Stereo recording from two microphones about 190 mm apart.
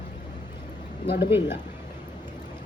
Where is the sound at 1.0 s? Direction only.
60° left (ahead or behind).